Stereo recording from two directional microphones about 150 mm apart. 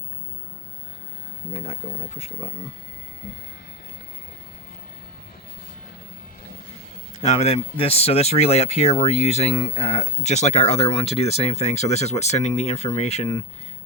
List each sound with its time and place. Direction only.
1.6 s speech: 45° left (ahead or behind)
7.2 s speech: 45° left (ahead or behind)